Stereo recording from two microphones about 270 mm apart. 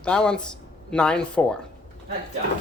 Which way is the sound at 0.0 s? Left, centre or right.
Centre.